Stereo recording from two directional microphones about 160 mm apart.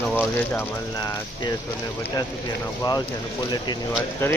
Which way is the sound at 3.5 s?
25° left (ahead or behind).